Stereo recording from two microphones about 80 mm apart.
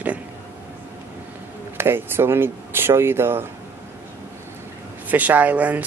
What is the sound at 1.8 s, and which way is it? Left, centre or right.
Speech, right.